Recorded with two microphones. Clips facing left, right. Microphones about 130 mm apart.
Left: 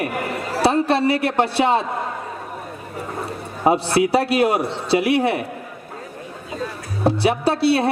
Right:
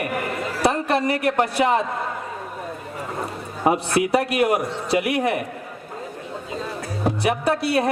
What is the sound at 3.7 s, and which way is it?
A man's voice, 30° left (ahead or behind).